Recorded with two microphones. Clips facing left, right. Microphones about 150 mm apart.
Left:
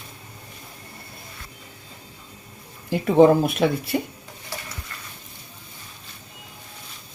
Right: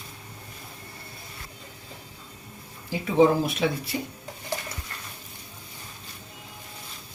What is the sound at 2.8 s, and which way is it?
Speech, 55° left (ahead or behind).